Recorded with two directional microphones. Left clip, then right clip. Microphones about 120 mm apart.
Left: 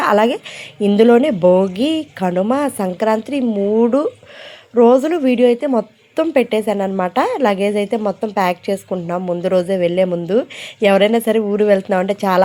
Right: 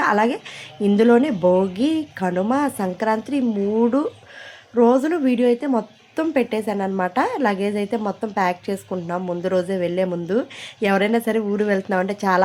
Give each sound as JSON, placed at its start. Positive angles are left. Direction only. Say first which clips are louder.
{"t": 0.0, "sound": "a woman's voice", "louder": "left 5 dB", "side_deg": 25}